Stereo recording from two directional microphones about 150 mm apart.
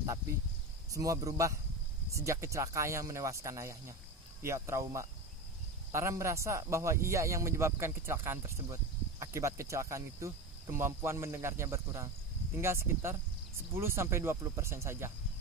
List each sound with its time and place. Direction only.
0.9 s speech: 20° right (ahead or behind)